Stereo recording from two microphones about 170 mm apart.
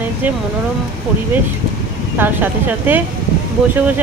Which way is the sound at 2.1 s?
10° right (ahead or behind).